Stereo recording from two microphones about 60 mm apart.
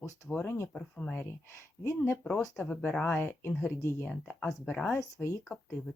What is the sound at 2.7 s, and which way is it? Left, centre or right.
Speech, left.